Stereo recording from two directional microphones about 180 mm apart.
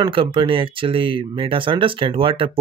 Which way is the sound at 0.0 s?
30° right (ahead or behind).